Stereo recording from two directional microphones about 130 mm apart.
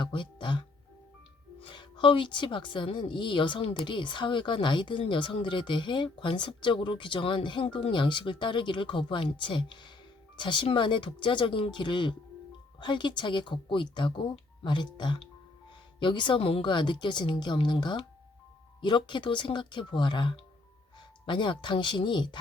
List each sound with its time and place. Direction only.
0.0 s speech: 40° left (ahead or behind)
1.6 s speech: 40° left (ahead or behind)